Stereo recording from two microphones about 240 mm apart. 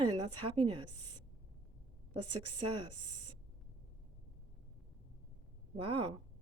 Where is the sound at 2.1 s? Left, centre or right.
Right.